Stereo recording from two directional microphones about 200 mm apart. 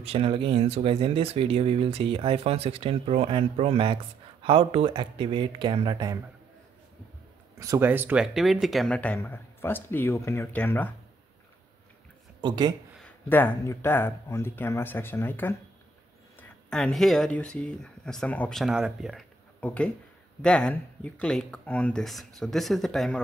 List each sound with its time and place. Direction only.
0.0 s speech: 30° right (ahead or behind)
7.5 s speech: 15° right (ahead or behind); by 10.9 s 10° left (ahead or behind)
12.4 s speech: 20° right (ahead or behind)
13.0 s speech: 10° left (ahead or behind)